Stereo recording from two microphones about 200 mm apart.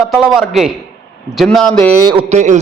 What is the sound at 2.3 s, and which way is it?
Speech, 35° right (ahead or behind).